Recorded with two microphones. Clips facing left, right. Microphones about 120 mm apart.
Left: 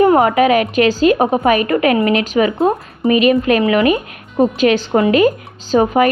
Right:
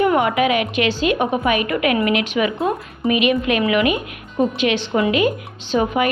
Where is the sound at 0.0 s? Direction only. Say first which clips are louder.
Left 5 dB; 35° left (ahead or behind).